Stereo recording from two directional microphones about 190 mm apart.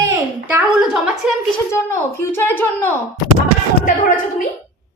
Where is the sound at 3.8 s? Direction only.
45° left (ahead or behind).